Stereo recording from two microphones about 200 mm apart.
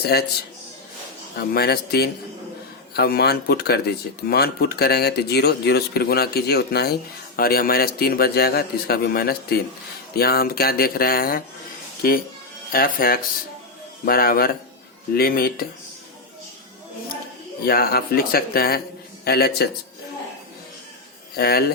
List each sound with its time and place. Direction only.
0.0 s speech: 50° left (ahead or behind)
1.5 s speech: 50° left (ahead or behind)
17.7 s speech: 50° left (ahead or behind)
21.3 s a man's voice: 50° left (ahead or behind)